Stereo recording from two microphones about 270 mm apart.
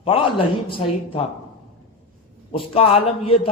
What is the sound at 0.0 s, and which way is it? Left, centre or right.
A man's voice, centre.